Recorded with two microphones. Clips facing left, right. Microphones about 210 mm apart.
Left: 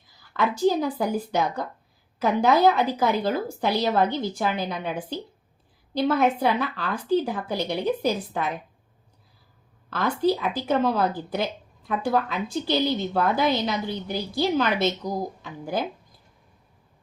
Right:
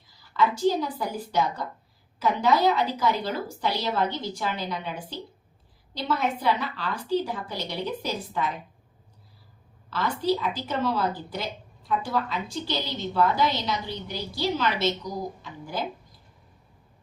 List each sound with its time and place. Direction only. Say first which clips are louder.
0.2 s a woman's voice: left 1 dB; 55° left (ahead or behind)
9.9 s a woman's voice: left 3 dB; 50° left (ahead or behind)